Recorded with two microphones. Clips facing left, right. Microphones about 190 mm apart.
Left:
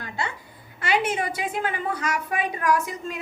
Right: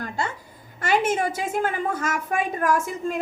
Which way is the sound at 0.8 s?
45° right (ahead or behind).